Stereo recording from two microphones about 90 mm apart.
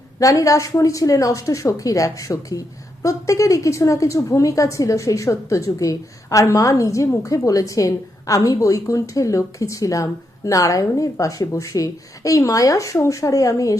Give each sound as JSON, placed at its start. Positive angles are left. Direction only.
{"t": 0.2, "sound": "a woman's voice", "side_deg": 40}